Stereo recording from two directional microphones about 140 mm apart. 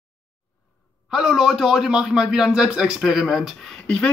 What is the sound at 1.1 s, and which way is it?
Speech, 5° right (ahead or behind).